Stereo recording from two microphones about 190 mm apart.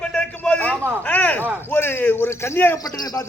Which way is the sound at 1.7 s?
10° left (ahead or behind).